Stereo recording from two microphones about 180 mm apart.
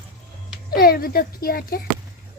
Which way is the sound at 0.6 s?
55° left (ahead or behind).